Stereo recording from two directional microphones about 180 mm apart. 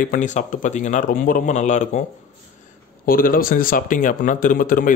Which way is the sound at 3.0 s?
55° left (ahead or behind).